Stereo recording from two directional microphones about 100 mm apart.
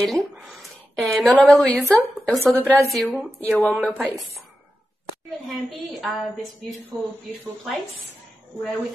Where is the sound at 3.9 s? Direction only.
15° right (ahead or behind).